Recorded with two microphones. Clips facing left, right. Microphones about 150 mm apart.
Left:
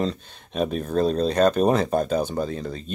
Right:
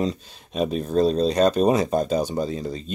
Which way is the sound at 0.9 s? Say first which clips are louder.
Right 2 dB; 30° right (ahead or behind).